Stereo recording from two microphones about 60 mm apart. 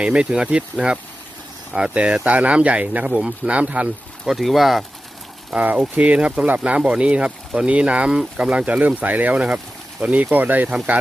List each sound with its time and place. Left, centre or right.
0.0 s speech: centre
4.3 s speech: centre
5.5 s speech: right